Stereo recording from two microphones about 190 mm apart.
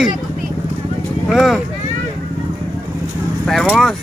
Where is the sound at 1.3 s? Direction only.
Centre (ahead or behind).